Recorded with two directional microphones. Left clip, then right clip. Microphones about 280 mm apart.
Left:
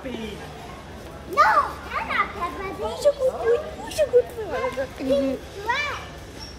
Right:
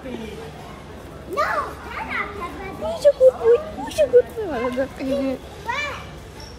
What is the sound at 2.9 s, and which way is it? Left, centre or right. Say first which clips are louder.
Speech: right 7 dB; right.